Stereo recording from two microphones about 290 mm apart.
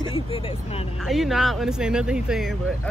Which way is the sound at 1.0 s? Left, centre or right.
Centre.